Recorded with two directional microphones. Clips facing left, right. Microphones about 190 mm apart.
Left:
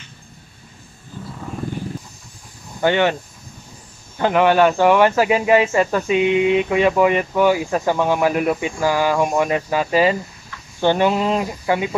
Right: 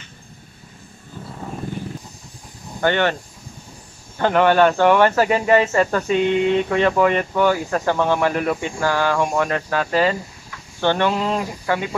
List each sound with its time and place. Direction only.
2.8 s speech: 10° left (ahead or behind)
4.2 s speech: 5° left (ahead or behind)